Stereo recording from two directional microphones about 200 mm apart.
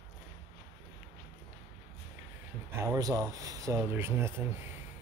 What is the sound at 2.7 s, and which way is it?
Speech, 15° right (ahead or behind).